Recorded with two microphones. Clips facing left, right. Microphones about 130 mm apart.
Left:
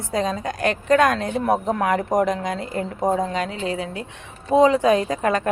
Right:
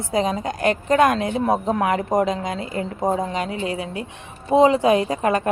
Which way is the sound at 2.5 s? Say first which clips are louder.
Even; 65° left (ahead or behind).